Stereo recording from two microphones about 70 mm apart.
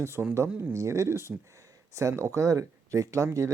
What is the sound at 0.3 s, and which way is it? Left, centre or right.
Speech, right.